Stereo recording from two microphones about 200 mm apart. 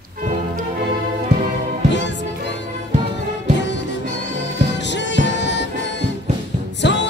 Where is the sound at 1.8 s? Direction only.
60° left (ahead or behind).